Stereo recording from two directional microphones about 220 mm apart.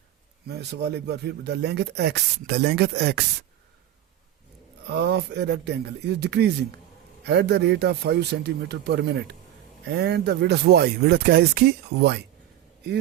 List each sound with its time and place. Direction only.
0.4 s speech: 50° right (ahead or behind)
4.9 s speech: 50° right (ahead or behind)